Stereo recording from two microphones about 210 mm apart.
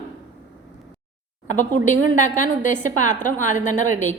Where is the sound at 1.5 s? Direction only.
35° left (ahead or behind).